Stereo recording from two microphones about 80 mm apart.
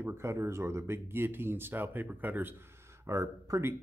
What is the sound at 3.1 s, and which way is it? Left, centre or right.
Speech, right.